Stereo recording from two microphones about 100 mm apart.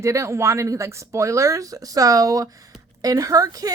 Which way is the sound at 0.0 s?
30° right (ahead or behind).